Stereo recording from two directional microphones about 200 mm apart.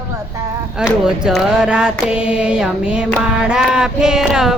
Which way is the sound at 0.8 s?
5° right (ahead or behind).